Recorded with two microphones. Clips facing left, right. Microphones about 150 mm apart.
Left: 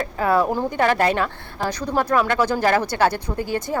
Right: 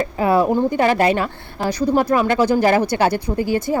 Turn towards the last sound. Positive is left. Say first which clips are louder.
# right 5 dB
turn(degrees=-10)  # may be behind; listen again after turning